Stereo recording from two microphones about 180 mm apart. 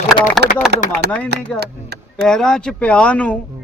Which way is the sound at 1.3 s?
65° right (ahead or behind).